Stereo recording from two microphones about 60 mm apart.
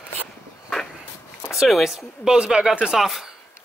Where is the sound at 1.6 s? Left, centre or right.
Centre.